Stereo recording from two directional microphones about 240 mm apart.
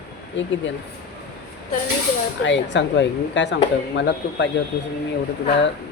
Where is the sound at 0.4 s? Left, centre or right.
Left.